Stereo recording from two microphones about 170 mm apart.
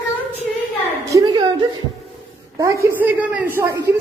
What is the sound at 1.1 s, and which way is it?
Speech, 25° right (ahead or behind).